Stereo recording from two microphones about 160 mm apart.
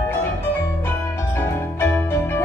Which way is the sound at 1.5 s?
15° left (ahead or behind).